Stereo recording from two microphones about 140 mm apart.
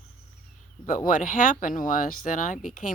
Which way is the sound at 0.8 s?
75° left (ahead or behind).